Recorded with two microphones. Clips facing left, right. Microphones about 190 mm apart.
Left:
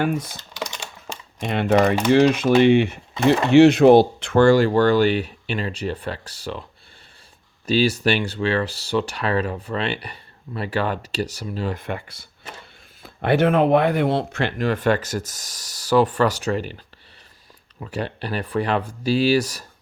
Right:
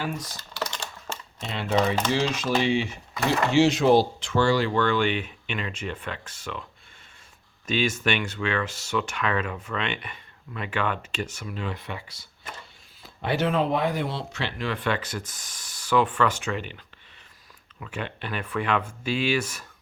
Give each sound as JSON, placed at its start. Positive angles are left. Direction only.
{"t": 0.0, "sound": "speech", "side_deg": 55}
{"t": 0.3, "sound": "typing", "side_deg": 15}
{"t": 1.5, "sound": "speech", "side_deg": 60}
{"t": 7.7, "sound": "speech", "side_deg": 35}